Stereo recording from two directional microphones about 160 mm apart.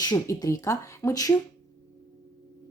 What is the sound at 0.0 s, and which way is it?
Speech, 25° left (ahead or behind).